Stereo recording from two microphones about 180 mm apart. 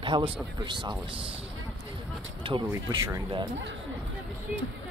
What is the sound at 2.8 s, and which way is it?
Speech, 20° right (ahead or behind).